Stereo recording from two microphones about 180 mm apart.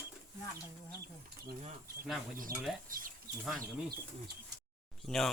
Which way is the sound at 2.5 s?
55° right (ahead or behind).